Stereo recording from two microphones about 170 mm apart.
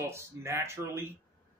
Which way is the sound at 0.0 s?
15° right (ahead or behind).